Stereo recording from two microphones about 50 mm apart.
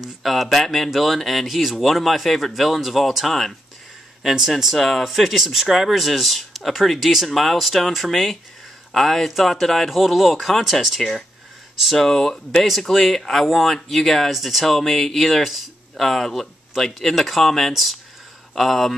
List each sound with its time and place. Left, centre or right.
0.0 s speech: centre